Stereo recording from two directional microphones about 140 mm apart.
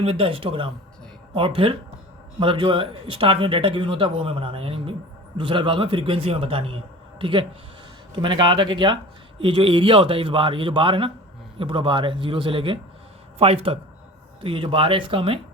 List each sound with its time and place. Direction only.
0.0 s speech: 40° right (ahead or behind)